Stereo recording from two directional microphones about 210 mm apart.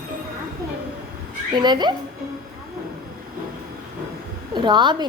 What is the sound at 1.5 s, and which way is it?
Speech, 20° right (ahead or behind).